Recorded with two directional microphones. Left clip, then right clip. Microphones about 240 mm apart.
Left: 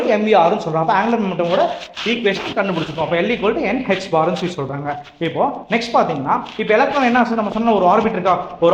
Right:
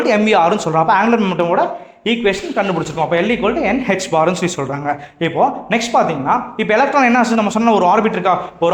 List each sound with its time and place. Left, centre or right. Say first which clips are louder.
0.1 s speech: even; right
2.1 s speech: right 2 dB; right